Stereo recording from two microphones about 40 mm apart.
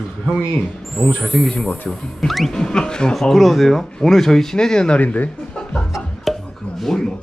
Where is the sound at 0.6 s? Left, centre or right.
Centre.